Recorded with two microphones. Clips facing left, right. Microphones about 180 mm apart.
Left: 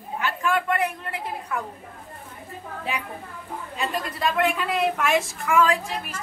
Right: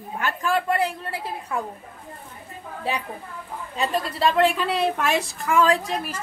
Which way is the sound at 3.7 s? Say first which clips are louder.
Right 4 dB; 30° right (ahead or behind).